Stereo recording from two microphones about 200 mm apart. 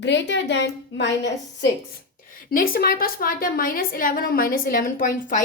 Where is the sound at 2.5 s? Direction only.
45° left (ahead or behind).